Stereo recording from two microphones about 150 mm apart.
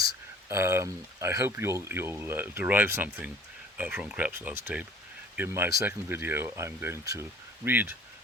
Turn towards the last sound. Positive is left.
turn(degrees=-15)  # may be behind; listen again after turning